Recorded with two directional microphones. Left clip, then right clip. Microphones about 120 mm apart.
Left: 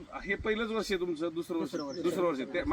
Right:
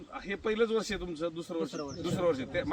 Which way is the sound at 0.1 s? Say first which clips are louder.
Left 1 dB; 40° right (ahead or behind).